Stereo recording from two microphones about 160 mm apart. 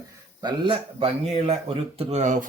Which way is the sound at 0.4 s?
30° right (ahead or behind).